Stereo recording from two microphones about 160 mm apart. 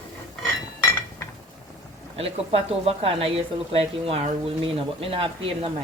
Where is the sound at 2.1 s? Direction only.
40° right (ahead or behind).